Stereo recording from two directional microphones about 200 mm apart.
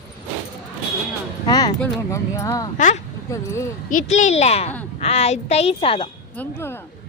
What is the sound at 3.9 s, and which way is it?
A woman's voice, 40° left (ahead or behind).